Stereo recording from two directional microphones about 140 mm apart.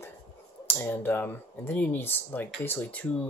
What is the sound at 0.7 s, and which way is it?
Speech, 15° left (ahead or behind).